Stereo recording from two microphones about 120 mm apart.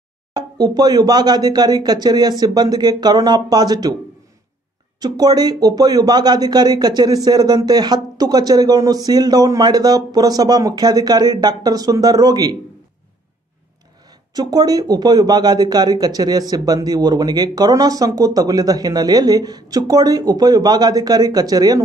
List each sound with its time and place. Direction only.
0.3 s speech: 35° right (ahead or behind)
5.0 s speech: 35° right (ahead or behind)
14.3 s speech: 35° right (ahead or behind)